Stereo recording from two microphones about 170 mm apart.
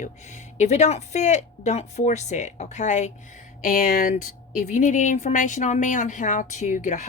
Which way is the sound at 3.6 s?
55° left (ahead or behind).